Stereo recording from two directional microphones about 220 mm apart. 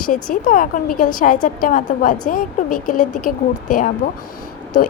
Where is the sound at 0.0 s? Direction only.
40° left (ahead or behind).